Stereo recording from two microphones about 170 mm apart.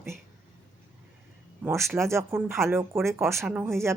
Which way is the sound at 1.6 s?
15° right (ahead or behind).